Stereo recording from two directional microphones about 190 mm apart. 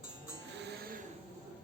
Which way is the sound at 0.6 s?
55° right (ahead or behind).